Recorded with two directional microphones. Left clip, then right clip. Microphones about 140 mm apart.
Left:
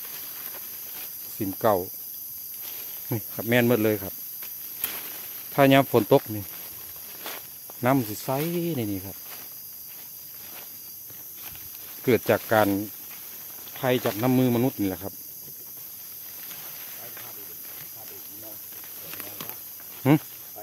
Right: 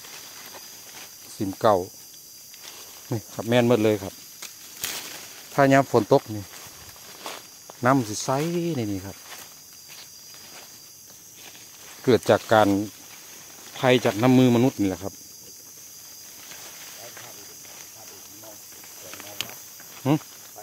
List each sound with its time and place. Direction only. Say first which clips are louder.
1.4 s speech: right 3 dB; 15° right (ahead or behind)
3.1 s speech: right 1 dB; 5° left (ahead or behind)
5.5 s speech: even; 10° left (ahead or behind)
5.9 s speech: right 1 dB; centre (ahead or behind)
7.2 s walk: right 2 dB; 5° right (ahead or behind)
8.1 s speech: right 3 dB; 15° right (ahead or behind)
12.0 s speech: right 3 dB; 20° right (ahead or behind)
13.7 s speech: right 5 dB; 55° right (ahead or behind); by 15.0 s 35° right (ahead or behind)